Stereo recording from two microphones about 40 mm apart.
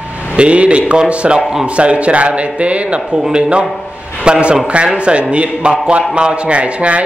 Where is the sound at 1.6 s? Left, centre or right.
Right.